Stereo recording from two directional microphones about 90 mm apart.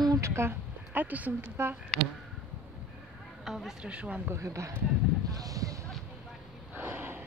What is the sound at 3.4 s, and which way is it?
Speech, 5° right (ahead or behind).